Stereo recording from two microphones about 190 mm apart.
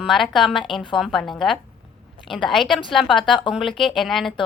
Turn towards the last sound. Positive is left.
turn(degrees=0)  # may be behind; listen again after turning